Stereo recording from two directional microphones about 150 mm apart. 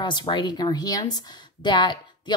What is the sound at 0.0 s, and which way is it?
Speech, 30° left (ahead or behind).